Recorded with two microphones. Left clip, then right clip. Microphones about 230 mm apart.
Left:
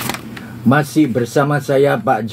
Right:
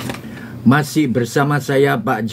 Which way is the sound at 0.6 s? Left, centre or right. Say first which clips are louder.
Left 2 dB; right.